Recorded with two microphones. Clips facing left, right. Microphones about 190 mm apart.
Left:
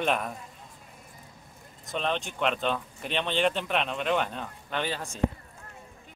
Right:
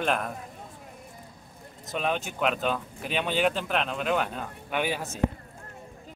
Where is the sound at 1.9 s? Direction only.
5° right (ahead or behind).